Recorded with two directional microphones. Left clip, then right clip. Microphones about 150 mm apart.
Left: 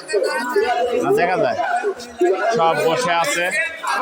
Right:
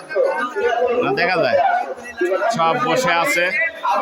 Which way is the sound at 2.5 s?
20° right (ahead or behind).